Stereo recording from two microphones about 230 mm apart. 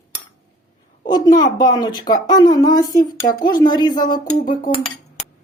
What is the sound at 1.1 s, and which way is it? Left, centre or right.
Speech, centre.